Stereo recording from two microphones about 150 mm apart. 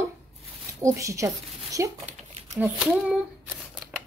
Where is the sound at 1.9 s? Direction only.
50° right (ahead or behind).